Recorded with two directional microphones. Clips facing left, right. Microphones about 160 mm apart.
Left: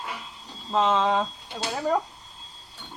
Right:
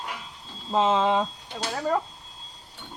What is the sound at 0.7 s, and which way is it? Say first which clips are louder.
Speech: right 1 dB; 10° right (ahead or behind).